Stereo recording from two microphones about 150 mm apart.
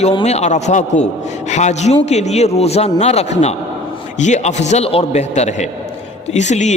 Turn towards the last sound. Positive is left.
turn(degrees=50)  # may be behind; listen again after turning